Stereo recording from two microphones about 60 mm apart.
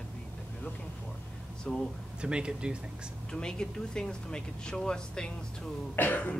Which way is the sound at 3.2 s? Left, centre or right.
Centre.